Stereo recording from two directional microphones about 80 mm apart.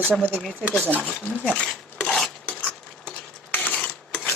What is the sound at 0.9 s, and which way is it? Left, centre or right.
Speech, centre.